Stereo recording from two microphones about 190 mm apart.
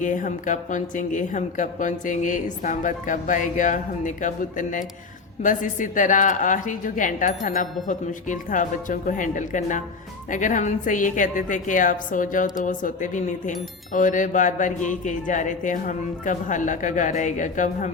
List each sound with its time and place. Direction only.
0.0 s a woman's voice: 40° left (ahead or behind)